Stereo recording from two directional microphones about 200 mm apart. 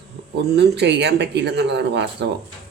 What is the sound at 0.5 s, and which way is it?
A man's voice, 55° right (ahead or behind).